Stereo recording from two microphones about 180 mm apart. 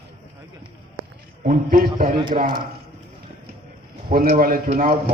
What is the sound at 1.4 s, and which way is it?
Speech, 50° right (ahead or behind).